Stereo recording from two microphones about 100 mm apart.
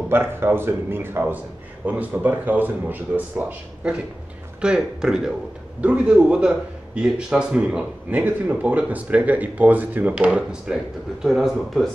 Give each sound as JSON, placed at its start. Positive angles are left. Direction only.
{"t": 0.1, "sound": "a man's voice", "side_deg": -25}